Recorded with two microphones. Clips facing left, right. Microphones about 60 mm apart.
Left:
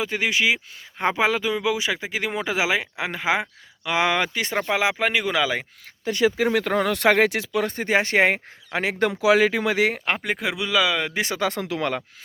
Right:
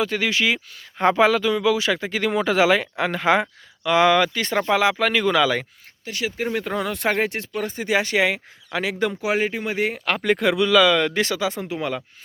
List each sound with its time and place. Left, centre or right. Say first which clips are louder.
0.0 s speech: right 1 dB; centre
3.8 s speech: right 5 dB; left
6.4 s speech: left 3 dB; left
7.9 s speech: even; left
9.0 s speech: left 5 dB; left
10.2 s speech: right 7 dB; centre
11.3 s speech: even; left
11.6 s speech: left 1 dB; left